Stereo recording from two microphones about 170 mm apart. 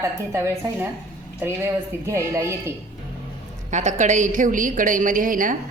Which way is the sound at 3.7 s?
45° right (ahead or behind).